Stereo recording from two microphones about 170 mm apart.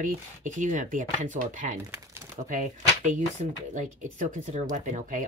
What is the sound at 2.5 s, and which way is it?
Speech, 45° right (ahead or behind).